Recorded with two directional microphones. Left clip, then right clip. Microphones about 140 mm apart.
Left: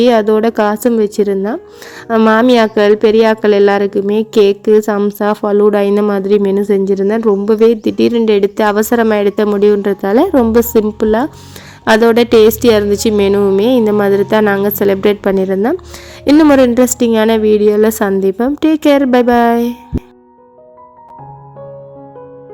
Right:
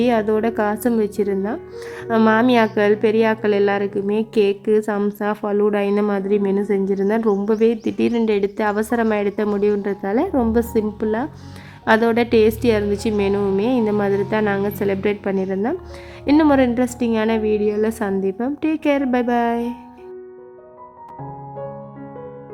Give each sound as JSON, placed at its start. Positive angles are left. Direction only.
{"t": 0.0, "sound": "a woman's voice", "side_deg": 35}
{"t": 7.0, "sound": "a woman's voice", "side_deg": 25}